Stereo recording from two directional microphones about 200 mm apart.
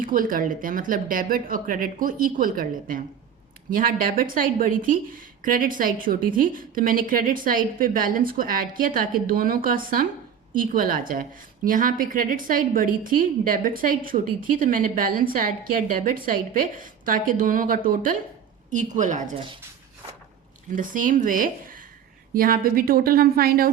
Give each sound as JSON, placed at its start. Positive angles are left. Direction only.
{"t": 0.0, "sound": "a woman's voice", "side_deg": -45}
{"t": 20.7, "sound": "a woman's voice", "side_deg": -40}